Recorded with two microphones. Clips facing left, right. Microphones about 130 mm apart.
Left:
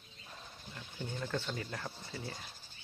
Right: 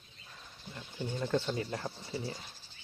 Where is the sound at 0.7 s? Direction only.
15° right (ahead or behind).